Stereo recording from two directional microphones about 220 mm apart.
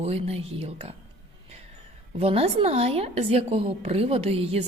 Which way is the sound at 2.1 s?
25° right (ahead or behind).